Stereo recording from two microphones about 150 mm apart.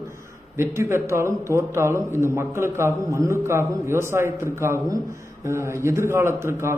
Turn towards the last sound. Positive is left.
turn(degrees=-15)  # may be behind; listen again after turning